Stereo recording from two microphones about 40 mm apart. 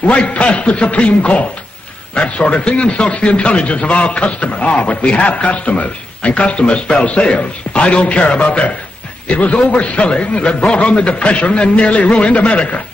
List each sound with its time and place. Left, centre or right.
0.0 s a man's voice: left